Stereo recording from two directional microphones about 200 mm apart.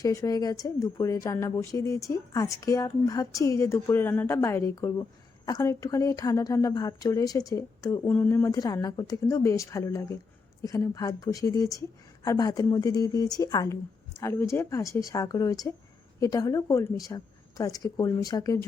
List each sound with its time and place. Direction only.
0.0 s a woman's voice: 15° left (ahead or behind)